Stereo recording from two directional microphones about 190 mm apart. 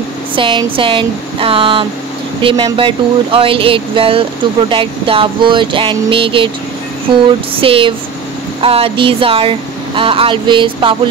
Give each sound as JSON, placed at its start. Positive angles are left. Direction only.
{"t": 0.4, "sound": "speech", "side_deg": -25}
{"t": 7.6, "sound": "speech", "side_deg": -30}